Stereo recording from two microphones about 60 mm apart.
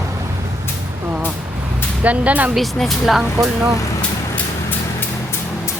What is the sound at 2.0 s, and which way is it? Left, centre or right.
Speech, right.